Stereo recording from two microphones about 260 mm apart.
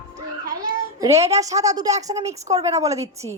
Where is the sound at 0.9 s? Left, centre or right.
Centre.